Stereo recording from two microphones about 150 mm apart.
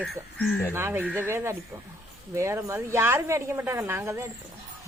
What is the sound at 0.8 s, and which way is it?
Speech, 15° right (ahead or behind).